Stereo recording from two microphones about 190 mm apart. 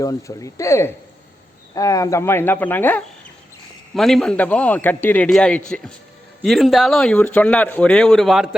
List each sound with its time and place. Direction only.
0.0 s a man's voice: 15° left (ahead or behind); by 8.4 s centre (ahead or behind)